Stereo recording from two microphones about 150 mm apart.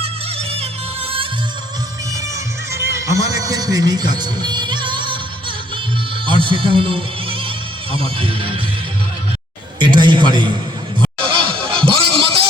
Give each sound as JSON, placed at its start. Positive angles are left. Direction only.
{"t": 0.0, "sound": "music", "side_deg": -40}
{"t": 2.8, "sound": "a man's voice", "side_deg": -20}
{"t": 6.2, "sound": "music", "side_deg": -35}
{"t": 7.9, "sound": "speech", "side_deg": -35}
{"t": 9.7, "sound": "a sound", "side_deg": -30}